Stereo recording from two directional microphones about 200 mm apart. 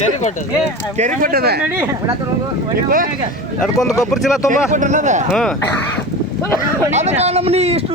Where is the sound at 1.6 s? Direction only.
10° right (ahead or behind).